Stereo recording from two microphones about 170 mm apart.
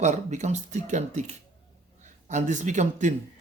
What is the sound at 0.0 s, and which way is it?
Speech, 45° right (ahead or behind).